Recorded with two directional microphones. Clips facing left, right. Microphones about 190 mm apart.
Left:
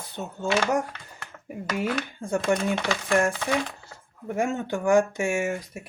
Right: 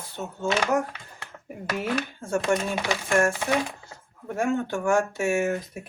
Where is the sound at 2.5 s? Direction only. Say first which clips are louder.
Left 1 dB; 5° right (ahead or behind).